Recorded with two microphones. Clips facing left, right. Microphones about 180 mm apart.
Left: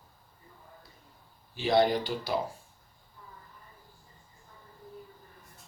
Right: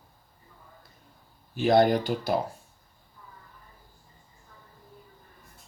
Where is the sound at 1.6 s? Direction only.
50° right (ahead or behind).